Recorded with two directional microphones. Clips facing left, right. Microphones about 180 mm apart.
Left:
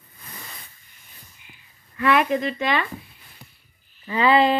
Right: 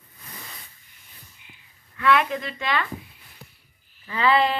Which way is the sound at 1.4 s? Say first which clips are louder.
Left 1 dB; 20° right (ahead or behind).